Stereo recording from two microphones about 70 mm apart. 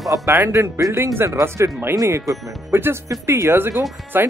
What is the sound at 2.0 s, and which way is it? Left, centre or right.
Speech, right.